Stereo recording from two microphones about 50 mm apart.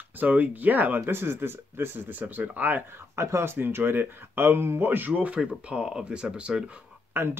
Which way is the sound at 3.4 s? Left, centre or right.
Right.